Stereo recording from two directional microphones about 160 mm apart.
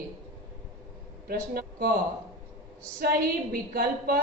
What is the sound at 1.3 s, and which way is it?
Speech, 65° right (ahead or behind).